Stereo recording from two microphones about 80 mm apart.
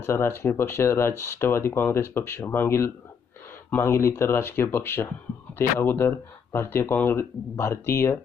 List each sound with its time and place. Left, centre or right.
0.0 s speech: left